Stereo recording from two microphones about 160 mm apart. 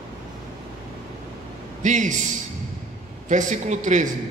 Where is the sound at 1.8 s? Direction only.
50° right (ahead or behind).